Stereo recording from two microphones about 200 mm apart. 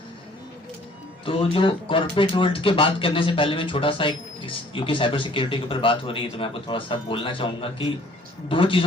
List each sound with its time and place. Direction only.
1.2 s speech: 25° left (ahead or behind)